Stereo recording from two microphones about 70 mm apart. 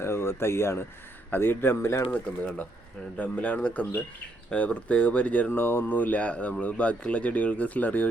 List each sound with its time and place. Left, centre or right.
0.0 s speech: left
2.0 s speech: left